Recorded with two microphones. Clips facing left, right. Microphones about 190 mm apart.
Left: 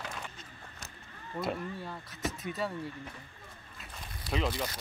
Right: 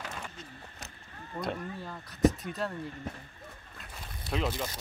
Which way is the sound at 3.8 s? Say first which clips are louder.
Even; centre (ahead or behind).